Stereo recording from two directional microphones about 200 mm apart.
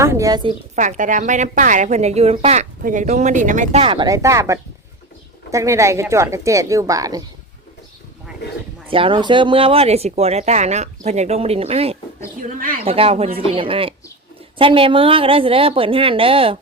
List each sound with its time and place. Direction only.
0.0 s a woman's voice: 15° right (ahead or behind)
0.8 s a woman's voice: 40° right (ahead or behind); by 7.2 s 15° right (ahead or behind)
8.9 s a woman's voice: 25° right (ahead or behind)
12.4 s speech: 45° right (ahead or behind)
12.8 s a woman's voice: 30° right (ahead or behind)